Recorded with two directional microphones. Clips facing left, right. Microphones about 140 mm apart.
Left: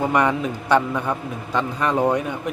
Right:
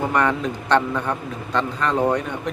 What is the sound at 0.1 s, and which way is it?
A man's voice, 10° left (ahead or behind).